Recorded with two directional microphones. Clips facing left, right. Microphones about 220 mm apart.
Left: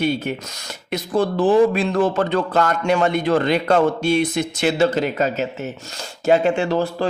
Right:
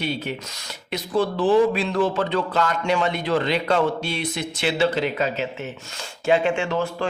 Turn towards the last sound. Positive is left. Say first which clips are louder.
# left 4 dB
turn(degrees=35)  # may be behind; listen again after turning